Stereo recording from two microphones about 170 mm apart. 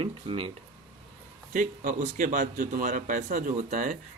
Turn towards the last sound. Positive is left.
turn(degrees=-45)  # may be behind; listen again after turning